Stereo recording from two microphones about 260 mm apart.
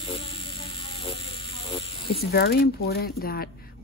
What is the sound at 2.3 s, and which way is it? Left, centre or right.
Speech, left.